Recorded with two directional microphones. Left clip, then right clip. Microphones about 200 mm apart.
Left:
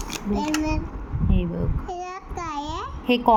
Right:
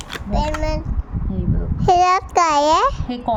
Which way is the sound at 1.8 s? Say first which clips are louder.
Right 19 dB; 70° right (ahead or behind).